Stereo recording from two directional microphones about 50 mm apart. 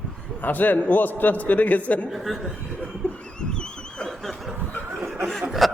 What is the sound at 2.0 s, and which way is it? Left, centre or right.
Speech, centre.